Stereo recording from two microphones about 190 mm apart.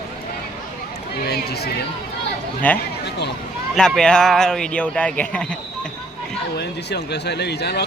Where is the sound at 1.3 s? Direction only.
60° left (ahead or behind).